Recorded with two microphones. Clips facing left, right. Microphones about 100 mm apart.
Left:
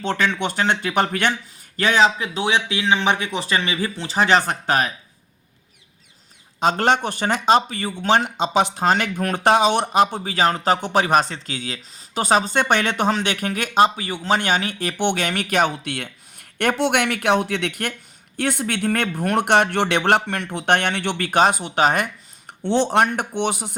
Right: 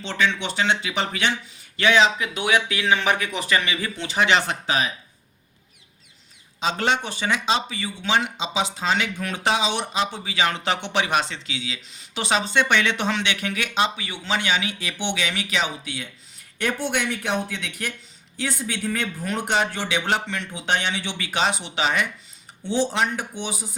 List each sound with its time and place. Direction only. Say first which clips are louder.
0.0 s speech: left 3 dB; 50° left (ahead or behind)
6.6 s speech: left 5 dB; 50° left (ahead or behind)
22.6 s speech: left 5 dB; 65° left (ahead or behind)